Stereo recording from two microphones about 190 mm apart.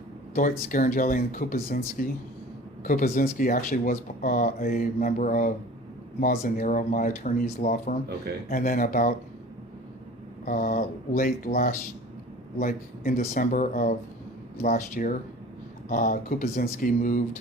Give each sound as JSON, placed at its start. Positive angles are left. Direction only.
{"t": 0.3, "sound": "speech", "side_deg": 45}
{"t": 10.4, "sound": "speech", "side_deg": 45}